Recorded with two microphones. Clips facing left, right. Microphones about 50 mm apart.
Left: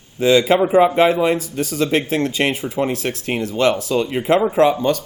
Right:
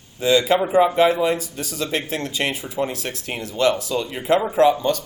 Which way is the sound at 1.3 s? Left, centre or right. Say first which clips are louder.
Left 6 dB; left.